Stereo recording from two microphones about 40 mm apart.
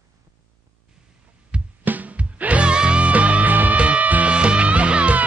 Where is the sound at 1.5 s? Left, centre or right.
Right.